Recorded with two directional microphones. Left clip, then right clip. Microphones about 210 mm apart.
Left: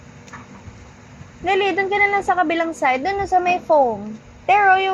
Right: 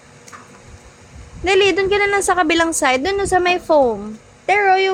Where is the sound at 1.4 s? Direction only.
45° right (ahead or behind).